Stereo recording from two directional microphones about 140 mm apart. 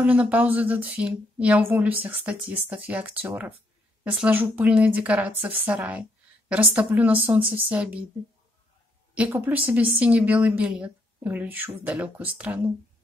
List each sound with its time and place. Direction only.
0.0 s a woman's voice: 10° right (ahead or behind)
9.1 s a woman's voice: 10° right (ahead or behind)